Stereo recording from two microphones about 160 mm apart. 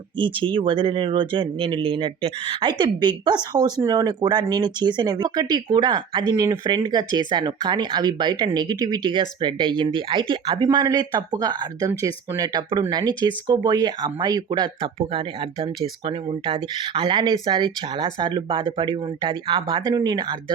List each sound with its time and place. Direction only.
0.2 s speech: 30° right (ahead or behind)